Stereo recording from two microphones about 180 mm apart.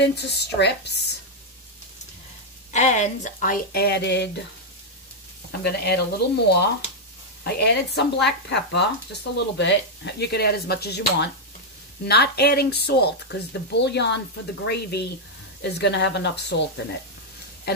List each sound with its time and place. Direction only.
0.0 s speech: 70° left (ahead or behind)
2.7 s speech: 40° left (ahead or behind); by 4.3 s 70° left (ahead or behind)
5.6 s speech: 60° left (ahead or behind)